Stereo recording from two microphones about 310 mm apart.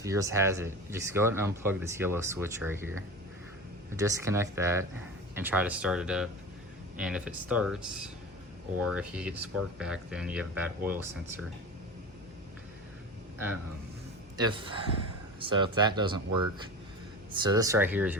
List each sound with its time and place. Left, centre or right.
0.0 s speech: centre
14.3 s speech: centre
17.4 s speech: centre